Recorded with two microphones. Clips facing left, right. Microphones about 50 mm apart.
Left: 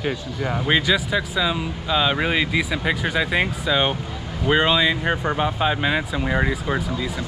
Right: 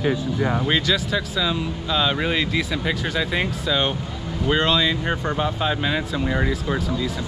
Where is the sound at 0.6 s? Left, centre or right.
Centre.